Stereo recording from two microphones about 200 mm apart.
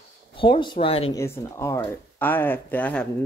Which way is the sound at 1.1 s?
15° left (ahead or behind).